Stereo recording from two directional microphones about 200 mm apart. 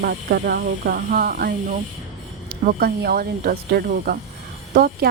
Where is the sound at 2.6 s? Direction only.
45° right (ahead or behind).